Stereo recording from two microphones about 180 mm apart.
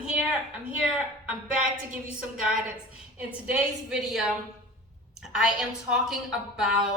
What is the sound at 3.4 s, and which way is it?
A woman's voice, 5° right (ahead or behind).